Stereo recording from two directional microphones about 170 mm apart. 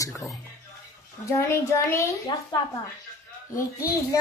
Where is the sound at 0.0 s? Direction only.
20° left (ahead or behind).